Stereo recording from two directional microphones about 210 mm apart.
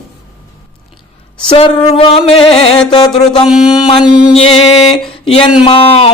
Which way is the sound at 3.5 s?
5° right (ahead or behind).